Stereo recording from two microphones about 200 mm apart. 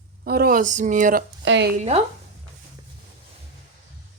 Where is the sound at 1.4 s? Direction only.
65° right (ahead or behind).